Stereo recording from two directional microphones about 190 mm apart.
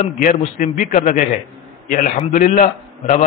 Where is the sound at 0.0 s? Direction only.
40° left (ahead or behind).